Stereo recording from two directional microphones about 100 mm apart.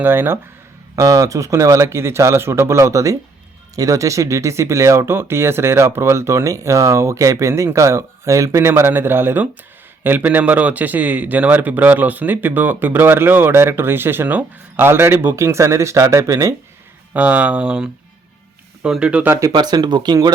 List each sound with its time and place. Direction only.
0.0 s speech: 20° right (ahead or behind)
0.9 s speech: 35° right (ahead or behind)
17.2 s speech: 15° right (ahead or behind)
19.5 s speech: 45° right (ahead or behind)